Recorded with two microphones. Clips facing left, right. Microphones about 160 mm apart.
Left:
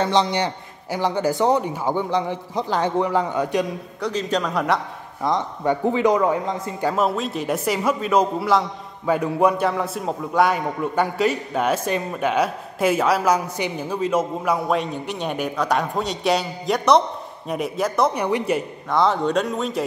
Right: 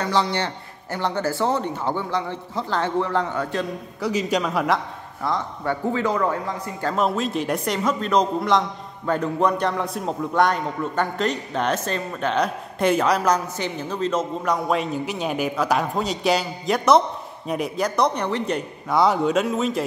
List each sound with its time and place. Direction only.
0.0 s a man's voice: 20° left (ahead or behind)
4.0 s a man's voice: 10° right (ahead or behind)
5.2 s a man's voice: 20° left (ahead or behind)
6.9 s a man's voice: 5° left (ahead or behind)
18.9 s a man's voice: 5° right (ahead or behind)